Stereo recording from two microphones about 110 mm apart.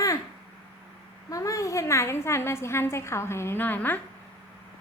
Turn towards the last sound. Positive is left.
turn(degrees=15)  # may be behind; listen again after turning